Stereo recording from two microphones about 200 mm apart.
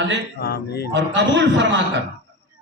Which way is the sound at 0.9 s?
65° right (ahead or behind).